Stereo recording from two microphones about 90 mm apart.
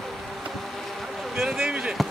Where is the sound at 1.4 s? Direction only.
5° right (ahead or behind).